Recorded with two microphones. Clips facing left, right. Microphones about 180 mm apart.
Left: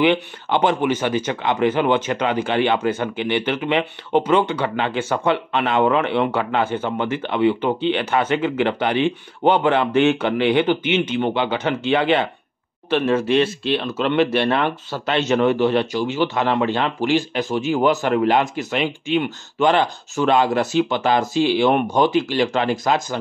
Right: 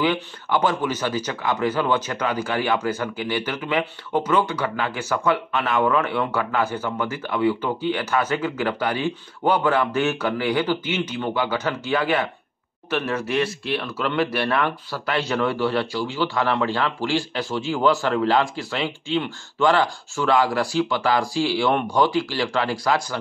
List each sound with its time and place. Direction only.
0.0 s speech: 20° left (ahead or behind)